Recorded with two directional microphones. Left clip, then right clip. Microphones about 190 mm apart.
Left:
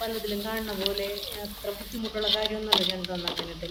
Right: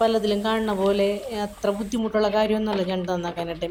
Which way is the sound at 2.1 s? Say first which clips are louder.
Right 6 dB; 35° right (ahead or behind).